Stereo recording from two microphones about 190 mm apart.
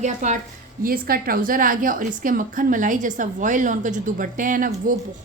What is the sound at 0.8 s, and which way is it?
A woman's voice, 50° right (ahead or behind).